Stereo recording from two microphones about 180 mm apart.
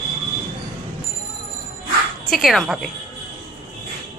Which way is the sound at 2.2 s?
Centre (ahead or behind).